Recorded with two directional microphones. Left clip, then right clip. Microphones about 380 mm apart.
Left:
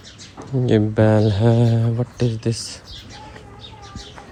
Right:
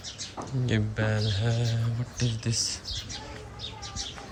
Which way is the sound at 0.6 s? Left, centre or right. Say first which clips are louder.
Left 14 dB; centre.